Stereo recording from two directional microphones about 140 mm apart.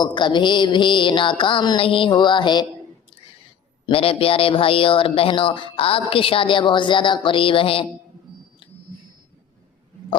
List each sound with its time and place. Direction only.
0.0 s speech: 35° left (ahead or behind)
3.8 s speech: 40° left (ahead or behind)